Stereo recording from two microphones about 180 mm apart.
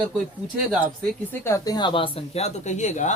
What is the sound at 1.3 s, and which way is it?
Speech, 15° left (ahead or behind).